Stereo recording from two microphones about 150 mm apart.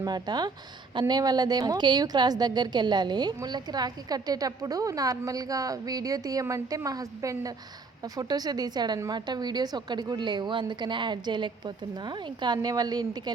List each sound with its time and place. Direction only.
0.0 s a woman's voice: 25° right (ahead or behind)